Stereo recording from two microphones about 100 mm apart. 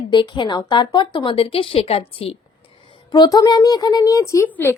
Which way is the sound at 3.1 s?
40° left (ahead or behind).